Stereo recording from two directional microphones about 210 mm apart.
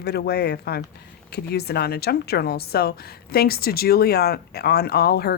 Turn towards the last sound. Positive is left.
turn(degrees=50)  # may be behind; listen again after turning